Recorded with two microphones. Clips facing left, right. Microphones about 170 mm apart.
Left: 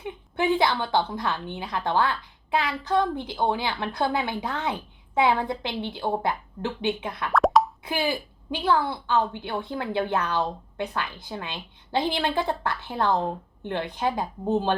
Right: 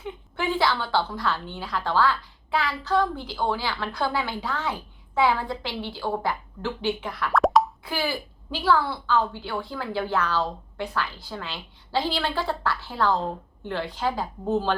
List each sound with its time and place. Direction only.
0.0 s a woman's voice: 20° left (ahead or behind)
7.3 s plop: centre (ahead or behind)
7.9 s a woman's voice: 20° left (ahead or behind)